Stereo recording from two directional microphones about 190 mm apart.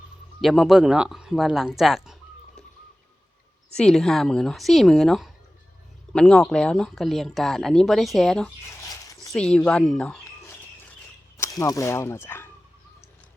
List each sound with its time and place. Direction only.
0.4 s speech: centre (ahead or behind)
3.8 s speech: centre (ahead or behind)
8.7 s dog: 20° left (ahead or behind)
9.3 s speech: 5° left (ahead or behind)
11.3 s speech: 15° left (ahead or behind)